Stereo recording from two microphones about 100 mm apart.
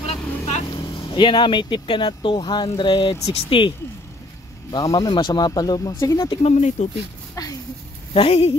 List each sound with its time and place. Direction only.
0.0 s vehicle: 80° left
1.1 s speech: 55° left (ahead or behind)
4.7 s speech: 40° left (ahead or behind)
7.4 s speech: 35° left (ahead or behind)
8.1 s speech: 70° left (ahead or behind)